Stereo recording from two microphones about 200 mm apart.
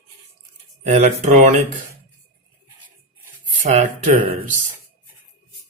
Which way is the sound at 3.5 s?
40° right (ahead or behind).